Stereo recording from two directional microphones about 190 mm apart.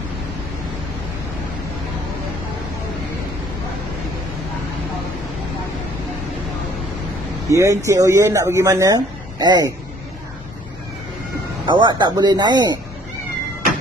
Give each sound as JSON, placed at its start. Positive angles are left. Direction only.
{"t": 7.4, "sound": "speech", "side_deg": -15}
{"t": 11.6, "sound": "speech", "side_deg": -25}